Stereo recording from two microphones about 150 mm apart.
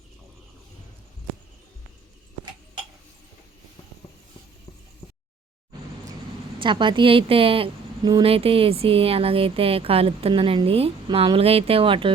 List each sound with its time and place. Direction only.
6.6 s a woman's voice: 30° right (ahead or behind)